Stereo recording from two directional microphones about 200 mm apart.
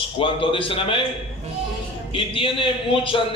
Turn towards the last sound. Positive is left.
turn(degrees=25)  # may be behind; listen again after turning